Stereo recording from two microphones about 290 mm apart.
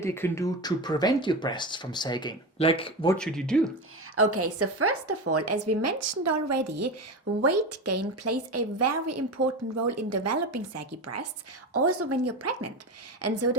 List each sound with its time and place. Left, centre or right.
0.0 s speech: centre
3.2 s speech: centre
4.1 s a woman's voice: right